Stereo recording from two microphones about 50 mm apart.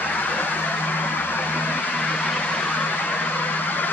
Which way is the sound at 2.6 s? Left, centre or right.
Left.